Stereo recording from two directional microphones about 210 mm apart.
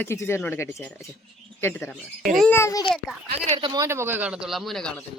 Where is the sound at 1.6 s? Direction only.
10° left (ahead or behind).